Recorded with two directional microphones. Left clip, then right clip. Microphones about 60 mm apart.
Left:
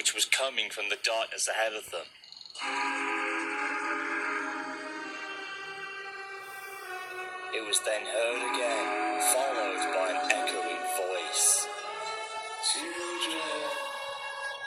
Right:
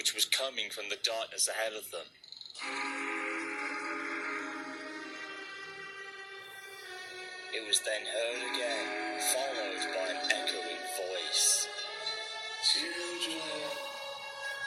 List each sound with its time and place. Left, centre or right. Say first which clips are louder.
0.0 s speech: left 3 dB; left
2.6 s train: left 6 dB; left
7.5 s music: left 2 dB; left
13.4 s music: left 5 dB; right